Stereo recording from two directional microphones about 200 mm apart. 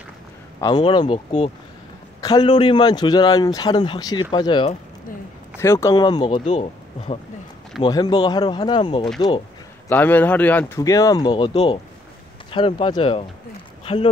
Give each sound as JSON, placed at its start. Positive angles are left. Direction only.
{"t": 0.6, "sound": "a man's voice", "side_deg": 20}
{"t": 6.4, "sound": "speech", "side_deg": 35}
{"t": 7.8, "sound": "a man's voice", "side_deg": 20}
{"t": 9.8, "sound": "a man's voice", "side_deg": 10}